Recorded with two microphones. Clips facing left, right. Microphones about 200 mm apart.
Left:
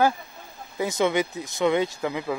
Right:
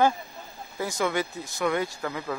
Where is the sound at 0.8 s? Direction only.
20° left (ahead or behind).